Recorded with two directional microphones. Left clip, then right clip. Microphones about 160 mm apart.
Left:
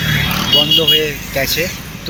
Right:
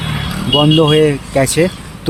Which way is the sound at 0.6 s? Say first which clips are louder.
Right 2 dB; 25° right (ahead or behind).